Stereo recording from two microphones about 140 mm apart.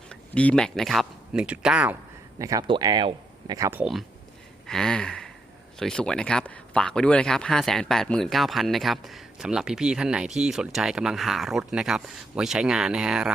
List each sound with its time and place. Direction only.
0.1 s speech: 5° left (ahead or behind); by 2.0 s 10° right (ahead or behind)
2.4 s speech: 25° right (ahead or behind)
3.6 s speech: 15° right (ahead or behind)
4.6 s a sound: 5° left (ahead or behind)
5.8 s speech: 5° left (ahead or behind)